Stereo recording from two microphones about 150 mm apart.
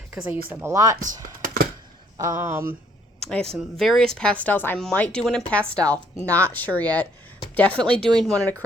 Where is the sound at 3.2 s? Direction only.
5° left (ahead or behind).